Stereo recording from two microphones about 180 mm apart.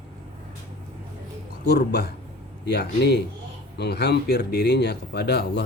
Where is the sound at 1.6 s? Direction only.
65° left (ahead or behind).